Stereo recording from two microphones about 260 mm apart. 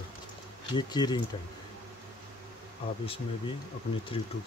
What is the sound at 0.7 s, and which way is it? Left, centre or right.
Speech, centre.